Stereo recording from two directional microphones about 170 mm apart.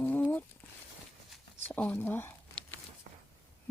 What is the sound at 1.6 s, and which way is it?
Speech, 10° left (ahead or behind).